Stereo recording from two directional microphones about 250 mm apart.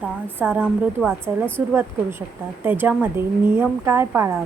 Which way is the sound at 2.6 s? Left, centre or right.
Centre.